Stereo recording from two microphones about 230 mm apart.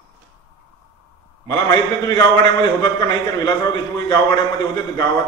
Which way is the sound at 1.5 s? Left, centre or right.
Centre.